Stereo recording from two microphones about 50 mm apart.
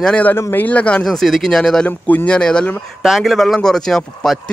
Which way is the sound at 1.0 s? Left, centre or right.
Centre.